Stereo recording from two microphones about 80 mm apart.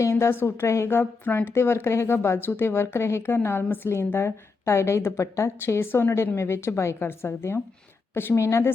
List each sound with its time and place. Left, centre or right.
0.0 s a woman's voice: left